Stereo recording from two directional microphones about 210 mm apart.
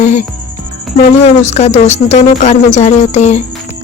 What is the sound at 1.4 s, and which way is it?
Speech, 35° left (ahead or behind).